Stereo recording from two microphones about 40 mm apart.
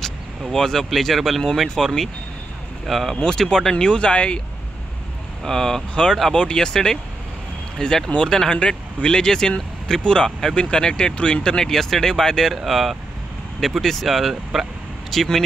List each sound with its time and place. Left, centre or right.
0.0 s vehicle: centre
0.8 s speech: centre
3.2 s speech: centre
3.7 s speech: left
5.4 s speech: centre
11.4 s speech: centre
12.5 s speech: centre
15.1 s speech: centre